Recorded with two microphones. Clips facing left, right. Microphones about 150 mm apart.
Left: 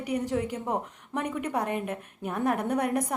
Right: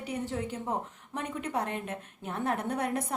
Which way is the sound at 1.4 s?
10° left (ahead or behind).